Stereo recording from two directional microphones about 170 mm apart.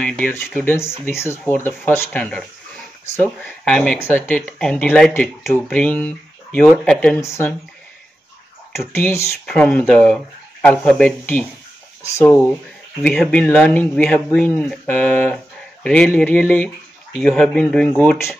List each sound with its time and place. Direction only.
0.0 s speech: 5° left (ahead or behind)
7.2 s speech: 15° left (ahead or behind)
8.9 s speech: 15° left (ahead or behind)
13.0 s speech: 5° left (ahead or behind)